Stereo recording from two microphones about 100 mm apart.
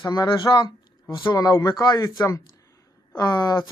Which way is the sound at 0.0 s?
40° left (ahead or behind).